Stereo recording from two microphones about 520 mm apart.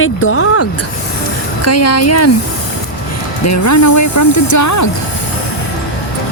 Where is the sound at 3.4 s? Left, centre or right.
Left.